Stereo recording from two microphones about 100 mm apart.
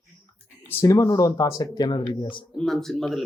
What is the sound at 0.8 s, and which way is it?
Speech, 40° left (ahead or behind).